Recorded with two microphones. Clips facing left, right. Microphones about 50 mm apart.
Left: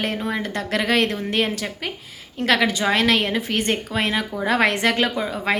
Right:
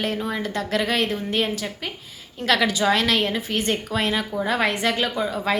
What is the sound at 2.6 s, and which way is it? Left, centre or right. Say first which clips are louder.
A woman's voice: even; left.